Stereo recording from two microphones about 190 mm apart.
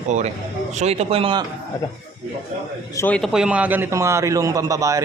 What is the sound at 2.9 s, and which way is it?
Speech, 15° left (ahead or behind).